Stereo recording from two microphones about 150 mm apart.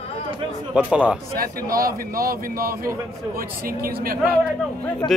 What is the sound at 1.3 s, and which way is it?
A man's voice, 80° right.